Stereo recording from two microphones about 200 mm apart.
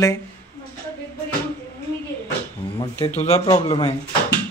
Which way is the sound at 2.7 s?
25° left (ahead or behind).